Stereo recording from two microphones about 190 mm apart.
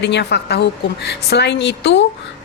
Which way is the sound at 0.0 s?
65° left (ahead or behind).